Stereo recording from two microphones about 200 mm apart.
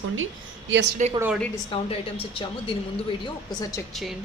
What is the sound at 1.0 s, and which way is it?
Speech, 35° right (ahead or behind).